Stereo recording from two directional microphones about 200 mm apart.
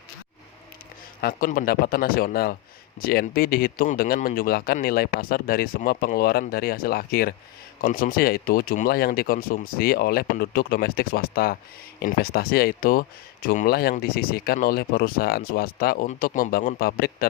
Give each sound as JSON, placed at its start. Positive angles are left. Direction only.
{"t": 1.2, "sound": "speech", "side_deg": 45}